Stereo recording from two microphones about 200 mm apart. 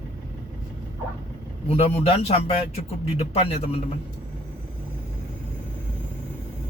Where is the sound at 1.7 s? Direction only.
30° left (ahead or behind).